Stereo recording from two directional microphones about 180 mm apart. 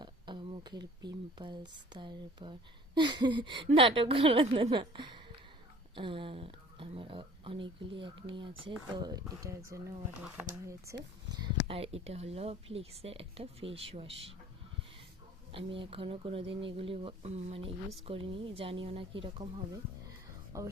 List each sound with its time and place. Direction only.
0.0 s speech: 25° right (ahead or behind)
11.3 s speech: 30° right (ahead or behind)
15.5 s speech: 30° right (ahead or behind)
20.5 s speech: 15° right (ahead or behind)